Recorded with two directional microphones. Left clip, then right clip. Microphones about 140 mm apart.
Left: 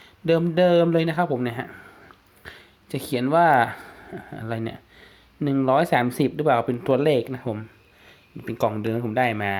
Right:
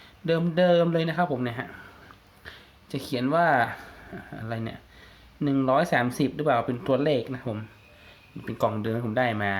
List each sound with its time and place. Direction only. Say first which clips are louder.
0.3 s speech: left 3 dB; 30° left (ahead or behind)